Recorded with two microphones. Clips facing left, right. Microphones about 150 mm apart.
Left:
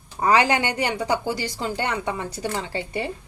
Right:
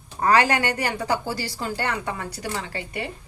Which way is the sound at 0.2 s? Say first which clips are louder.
Even; 20° left (ahead or behind).